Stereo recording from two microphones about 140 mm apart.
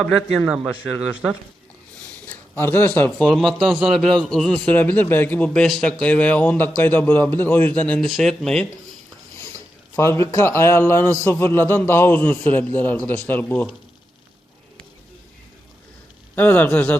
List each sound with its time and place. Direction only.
0.3 s a man's voice: 5° right (ahead or behind)
2.2 s a man's voice: 15° left (ahead or behind)
9.4 s a man's voice: 20° left (ahead or behind)
16.3 s a man's voice: 15° left (ahead or behind)